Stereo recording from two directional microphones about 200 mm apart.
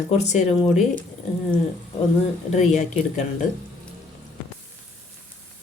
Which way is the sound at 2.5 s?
35° left (ahead or behind).